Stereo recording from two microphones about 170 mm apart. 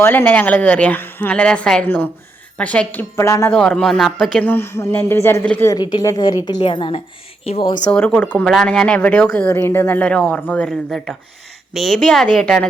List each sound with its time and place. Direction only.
0.0 s speech: 15° left (ahead or behind)
3.6 s speech: 5° left (ahead or behind)
5.6 s a woman's voice: 25° left (ahead or behind)
7.9 s a woman's voice: 10° left (ahead or behind)